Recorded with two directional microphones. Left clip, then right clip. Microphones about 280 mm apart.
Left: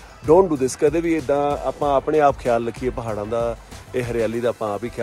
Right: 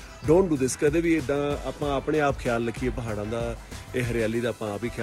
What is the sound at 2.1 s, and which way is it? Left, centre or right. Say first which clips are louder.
Speech: left 4 dB; left.